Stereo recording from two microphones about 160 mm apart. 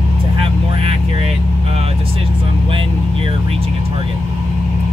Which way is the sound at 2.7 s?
35° right (ahead or behind).